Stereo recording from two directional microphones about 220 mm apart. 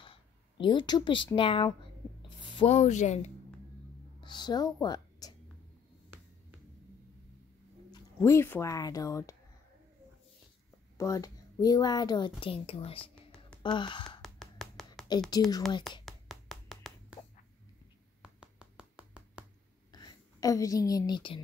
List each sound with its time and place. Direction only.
0.0 s speech: 20° left (ahead or behind)
4.2 s speech: 20° left (ahead or behind)
7.9 s speech: 10° left (ahead or behind)
11.0 s a woman's voice: 15° left (ahead or behind)
13.0 s a sound: 5° left (ahead or behind)
13.6 s gasp: 20° left (ahead or behind)
14.2 s finger snapping: centre (ahead or behind)
15.0 s a woman's voice: 20° left (ahead or behind)
16.1 s clapping: centre (ahead or behind)
18.2 s a sound: 5° right (ahead or behind)
19.9 s a woman's voice: 15° left (ahead or behind)